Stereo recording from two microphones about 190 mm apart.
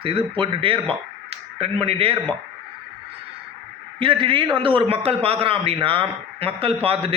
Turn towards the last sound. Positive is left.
turn(degrees=-30)  # may be behind; listen again after turning